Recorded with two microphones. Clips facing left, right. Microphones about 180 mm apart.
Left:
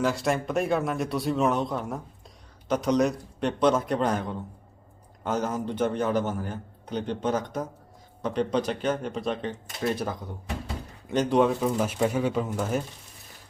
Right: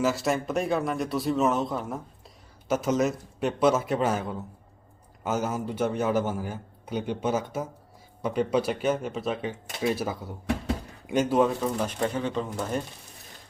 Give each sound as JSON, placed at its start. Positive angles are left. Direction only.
{"t": 0.0, "sound": "a man's voice", "side_deg": 0}
{"t": 11.6, "sound": "speech", "side_deg": 5}